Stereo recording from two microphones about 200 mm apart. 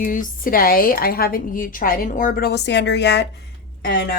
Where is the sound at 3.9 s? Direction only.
50° left (ahead or behind).